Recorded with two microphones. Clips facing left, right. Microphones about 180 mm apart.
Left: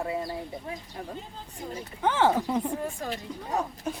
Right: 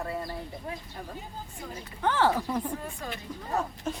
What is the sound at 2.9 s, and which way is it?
Speech, 35° left (ahead or behind).